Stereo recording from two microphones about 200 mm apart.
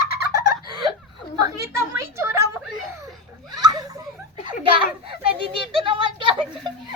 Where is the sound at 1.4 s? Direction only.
15° right (ahead or behind).